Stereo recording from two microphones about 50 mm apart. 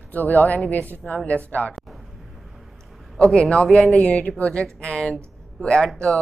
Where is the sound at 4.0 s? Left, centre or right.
Left.